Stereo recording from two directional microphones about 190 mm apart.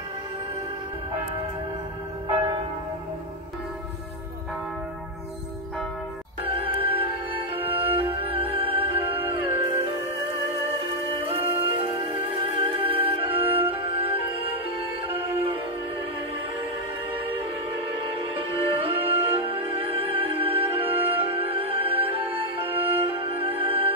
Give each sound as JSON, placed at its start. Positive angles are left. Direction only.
{"t": 6.4, "sound": "music", "side_deg": -30}
{"t": 11.2, "sound": "music", "side_deg": -30}
{"t": 18.3, "sound": "music", "side_deg": -30}